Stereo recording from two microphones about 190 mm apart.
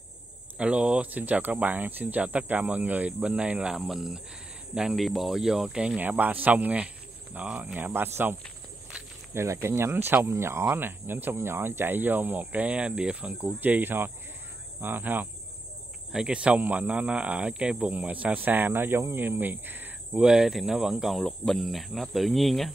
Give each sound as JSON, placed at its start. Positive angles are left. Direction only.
{"t": 0.6, "sound": "speech", "side_deg": -5}